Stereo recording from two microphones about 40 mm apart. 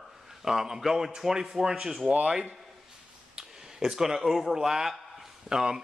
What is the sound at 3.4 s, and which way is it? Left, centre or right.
A man's voice, centre.